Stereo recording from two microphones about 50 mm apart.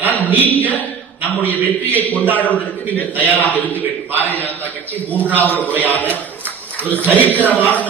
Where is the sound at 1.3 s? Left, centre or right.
Left.